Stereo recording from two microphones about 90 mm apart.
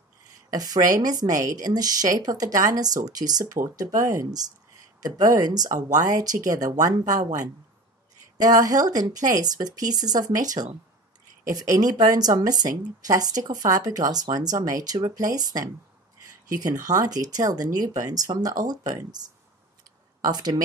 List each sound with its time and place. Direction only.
0.5 s a woman's voice: 45° right (ahead or behind)
20.2 s a woman's voice: 50° right (ahead or behind)